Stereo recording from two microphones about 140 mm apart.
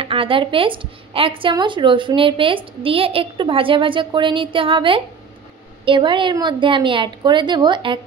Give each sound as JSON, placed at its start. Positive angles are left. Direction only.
{"t": 0.0, "sound": "a woman's voice", "side_deg": -40}